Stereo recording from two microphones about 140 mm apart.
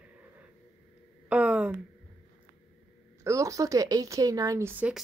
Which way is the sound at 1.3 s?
10° right (ahead or behind).